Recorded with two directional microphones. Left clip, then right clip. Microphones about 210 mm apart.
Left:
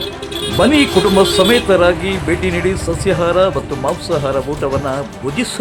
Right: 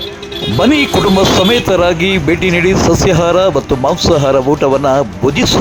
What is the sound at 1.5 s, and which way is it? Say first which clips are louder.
Speech: right 1 dB; 35° right (ahead or behind).